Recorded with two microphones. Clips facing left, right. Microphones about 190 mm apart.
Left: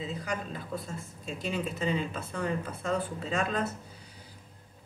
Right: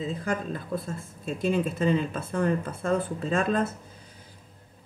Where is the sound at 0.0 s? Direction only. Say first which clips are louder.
Right 5 dB; 50° right (ahead or behind).